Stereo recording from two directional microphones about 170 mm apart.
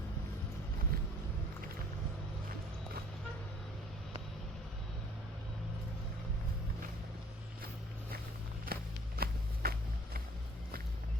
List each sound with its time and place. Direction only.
8.6 s walk: 65° right (ahead or behind)